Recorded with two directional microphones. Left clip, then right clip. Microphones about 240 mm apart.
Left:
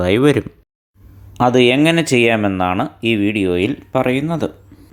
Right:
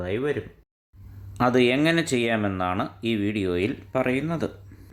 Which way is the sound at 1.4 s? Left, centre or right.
Centre.